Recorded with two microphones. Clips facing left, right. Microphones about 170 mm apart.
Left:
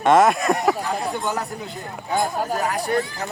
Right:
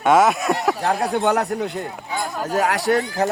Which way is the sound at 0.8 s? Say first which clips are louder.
Right 5 dB; 75° right (ahead or behind).